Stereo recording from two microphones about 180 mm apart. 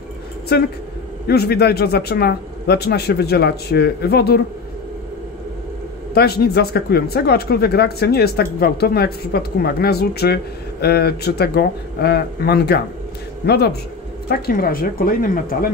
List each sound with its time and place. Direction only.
0.5 s speech: 65° left (ahead or behind)
6.1 s speech: 60° left (ahead or behind)